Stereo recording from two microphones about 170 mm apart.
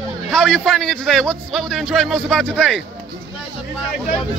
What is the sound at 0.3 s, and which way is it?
A man's voice, 5° left (ahead or behind).